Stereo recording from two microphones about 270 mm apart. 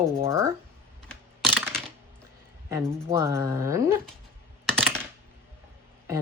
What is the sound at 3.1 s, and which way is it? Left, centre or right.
Speech, centre.